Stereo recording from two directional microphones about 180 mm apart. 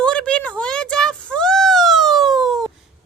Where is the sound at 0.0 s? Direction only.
5° left (ahead or behind).